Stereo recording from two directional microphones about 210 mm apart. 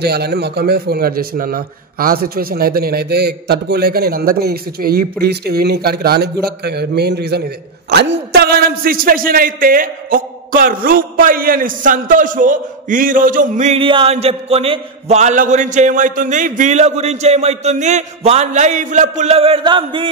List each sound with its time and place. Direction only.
0.0 s a man's voice: 50° right (ahead or behind); by 20.1 s 25° right (ahead or behind)